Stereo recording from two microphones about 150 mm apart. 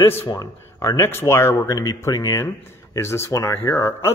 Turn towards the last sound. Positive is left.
turn(degrees=15)  # may be behind; listen again after turning